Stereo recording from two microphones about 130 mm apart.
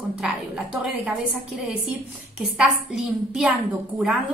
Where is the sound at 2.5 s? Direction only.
5° right (ahead or behind).